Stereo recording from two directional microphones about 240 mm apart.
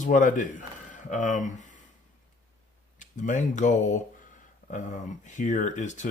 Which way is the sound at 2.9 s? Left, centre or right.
Left.